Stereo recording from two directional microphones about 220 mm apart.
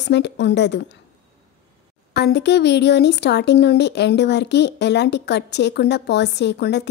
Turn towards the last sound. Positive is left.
turn(degrees=50)  # may be behind; listen again after turning